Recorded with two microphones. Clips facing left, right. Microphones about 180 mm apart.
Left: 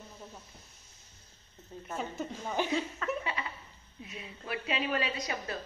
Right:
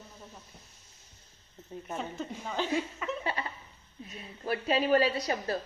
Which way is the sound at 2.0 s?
5° left (ahead or behind).